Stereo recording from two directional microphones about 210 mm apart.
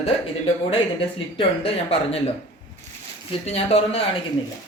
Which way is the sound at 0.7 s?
25° left (ahead or behind).